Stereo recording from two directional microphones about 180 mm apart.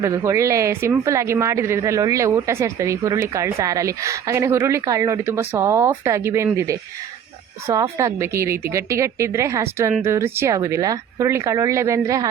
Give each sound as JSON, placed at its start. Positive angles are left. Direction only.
{"t": 0.0, "sound": "a woman's voice", "side_deg": -15}